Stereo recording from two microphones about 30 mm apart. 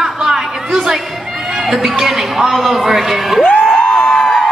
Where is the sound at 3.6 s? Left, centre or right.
Left.